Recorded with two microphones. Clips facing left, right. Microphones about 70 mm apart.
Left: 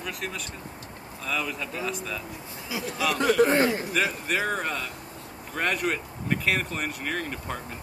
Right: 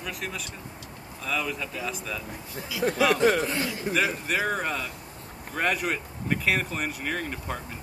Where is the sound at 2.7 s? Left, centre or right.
Left.